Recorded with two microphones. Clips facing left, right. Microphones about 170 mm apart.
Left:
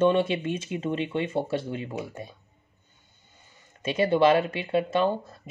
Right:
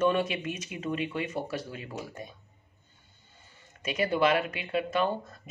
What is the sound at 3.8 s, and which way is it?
Speech, 25° left (ahead or behind).